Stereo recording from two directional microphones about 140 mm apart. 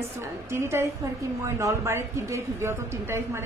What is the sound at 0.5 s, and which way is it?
A woman's voice, 20° right (ahead or behind).